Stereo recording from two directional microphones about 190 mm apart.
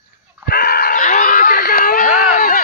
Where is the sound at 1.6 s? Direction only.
55° left (ahead or behind).